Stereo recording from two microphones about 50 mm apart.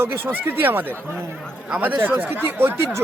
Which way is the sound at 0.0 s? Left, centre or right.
Right.